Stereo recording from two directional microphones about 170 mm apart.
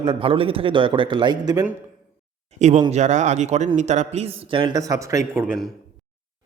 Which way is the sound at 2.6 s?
40° right (ahead or behind).